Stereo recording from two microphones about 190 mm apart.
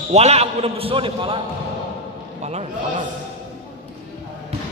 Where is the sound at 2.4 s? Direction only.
35° right (ahead or behind).